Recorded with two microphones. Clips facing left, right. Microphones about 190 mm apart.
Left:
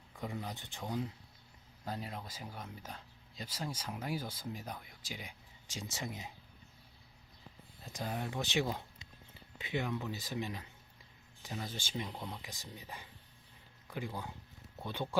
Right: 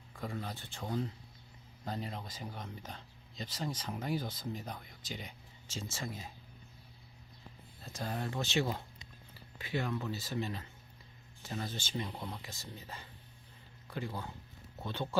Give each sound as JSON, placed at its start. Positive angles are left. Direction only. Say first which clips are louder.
{"t": 0.2, "sound": "speech", "louder": "right 1 dB", "side_deg": 15}
{"t": 7.9, "sound": "speech", "louder": "right 1 dB", "side_deg": 15}